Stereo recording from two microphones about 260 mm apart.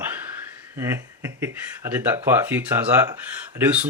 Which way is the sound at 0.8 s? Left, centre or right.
Centre.